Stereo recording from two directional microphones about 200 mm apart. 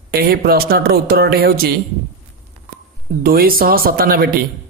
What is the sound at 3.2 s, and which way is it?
A man's voice, 45° right (ahead or behind).